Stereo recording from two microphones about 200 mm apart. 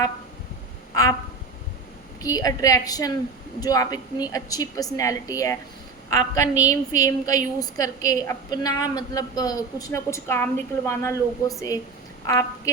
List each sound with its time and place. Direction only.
2.2 s a woman's voice: 15° left (ahead or behind)